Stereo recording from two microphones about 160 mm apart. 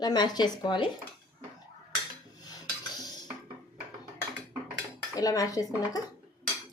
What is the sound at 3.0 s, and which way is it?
Dishes, 25° left (ahead or behind).